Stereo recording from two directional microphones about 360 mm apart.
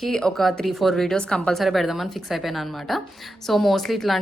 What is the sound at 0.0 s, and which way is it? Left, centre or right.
Speech, centre.